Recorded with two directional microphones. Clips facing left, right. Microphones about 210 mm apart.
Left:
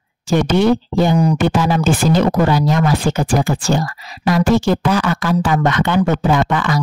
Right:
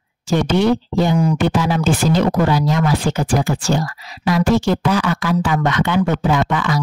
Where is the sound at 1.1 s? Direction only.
35° left (ahead or behind).